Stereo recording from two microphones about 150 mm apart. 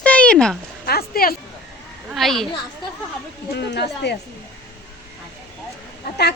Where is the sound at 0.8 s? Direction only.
85° left.